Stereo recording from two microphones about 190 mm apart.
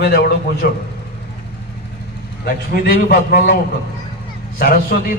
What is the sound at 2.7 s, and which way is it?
Speech, 55° left (ahead or behind).